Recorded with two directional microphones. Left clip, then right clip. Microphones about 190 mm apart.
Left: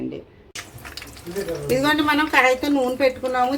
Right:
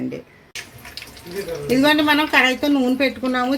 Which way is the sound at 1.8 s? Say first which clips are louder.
Right 4 dB; 45° right (ahead or behind).